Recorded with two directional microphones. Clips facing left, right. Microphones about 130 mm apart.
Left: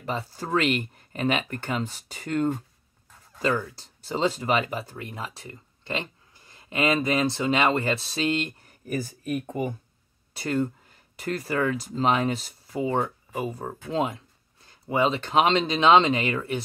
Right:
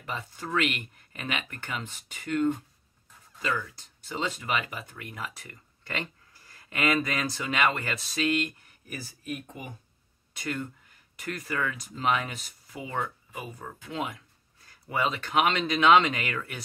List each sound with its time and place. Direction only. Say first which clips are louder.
0.0 s speech: left 5 dB; 35° left (ahead or behind)
8.8 s speech: left 9 dB; 45° left (ahead or behind)
10.3 s speech: left 8 dB; 35° left (ahead or behind)